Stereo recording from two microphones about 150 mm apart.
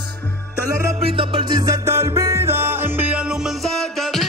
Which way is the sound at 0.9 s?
35° right (ahead or behind).